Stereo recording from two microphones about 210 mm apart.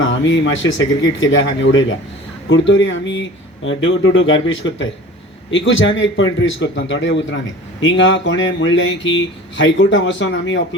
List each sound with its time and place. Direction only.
0.0 s speech: 60° left (ahead or behind)